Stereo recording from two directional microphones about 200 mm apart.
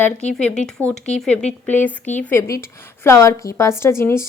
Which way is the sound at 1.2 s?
5° left (ahead or behind).